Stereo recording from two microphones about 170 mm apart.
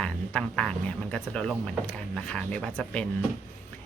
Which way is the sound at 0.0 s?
5° left (ahead or behind).